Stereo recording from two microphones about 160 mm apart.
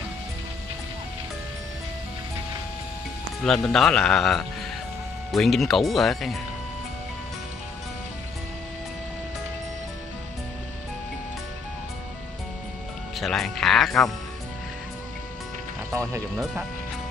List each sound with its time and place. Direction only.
3.4 s a man's voice: 5° left (ahead or behind)
13.2 s a man's voice: 5° left (ahead or behind)
15.9 s speech: 15° right (ahead or behind)